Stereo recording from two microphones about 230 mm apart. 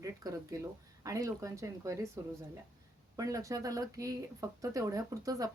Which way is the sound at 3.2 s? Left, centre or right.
Centre.